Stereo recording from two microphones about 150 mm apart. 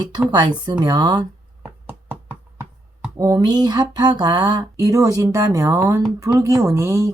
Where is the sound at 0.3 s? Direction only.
30° right (ahead or behind).